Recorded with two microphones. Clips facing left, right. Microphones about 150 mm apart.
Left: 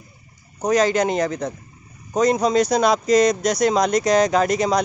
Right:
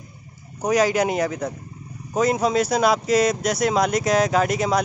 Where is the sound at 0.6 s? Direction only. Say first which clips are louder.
Left 1 dB; 10° right (ahead or behind).